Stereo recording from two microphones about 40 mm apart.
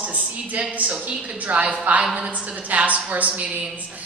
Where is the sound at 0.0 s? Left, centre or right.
Right.